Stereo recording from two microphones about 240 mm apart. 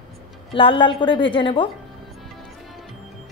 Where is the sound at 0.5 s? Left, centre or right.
Left.